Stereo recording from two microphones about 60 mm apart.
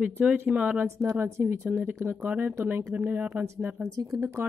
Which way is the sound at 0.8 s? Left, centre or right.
Right.